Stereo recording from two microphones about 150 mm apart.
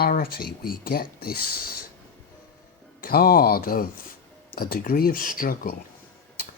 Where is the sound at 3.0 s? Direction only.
85° left; by 5.7 s 65° left (ahead or behind).